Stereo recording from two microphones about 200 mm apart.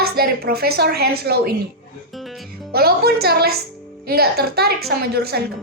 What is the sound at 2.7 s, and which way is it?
A woman's voice, 50° right (ahead or behind).